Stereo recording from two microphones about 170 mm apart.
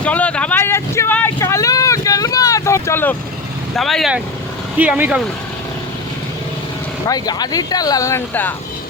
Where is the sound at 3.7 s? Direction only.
Centre (ahead or behind).